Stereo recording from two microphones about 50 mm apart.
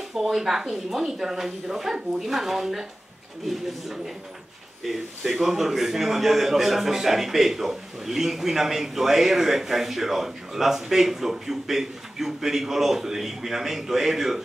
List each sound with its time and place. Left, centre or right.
0.1 s a man's voice: centre